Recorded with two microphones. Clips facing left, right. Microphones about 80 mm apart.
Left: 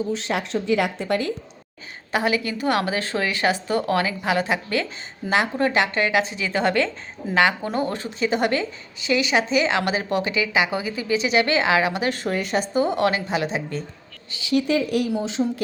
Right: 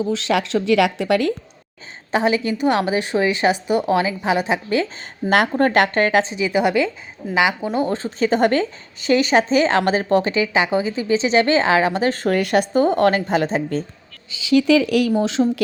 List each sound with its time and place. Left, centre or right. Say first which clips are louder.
0.1 s speech: right 5 dB; right
2.1 s a woman's voice: right 4 dB; right
5.3 s speech: right 4 dB; right
6.2 s a woman's voice: right 4 dB; centre
7.9 s a woman's voice: right 4 dB; right
12.3 s speech: right 8 dB; right
12.7 s a woman's voice: right 4 dB; right
14.5 s speech: right 6 dB; right